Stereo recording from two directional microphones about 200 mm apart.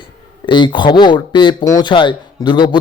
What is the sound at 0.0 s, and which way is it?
A man's voice, 20° left (ahead or behind).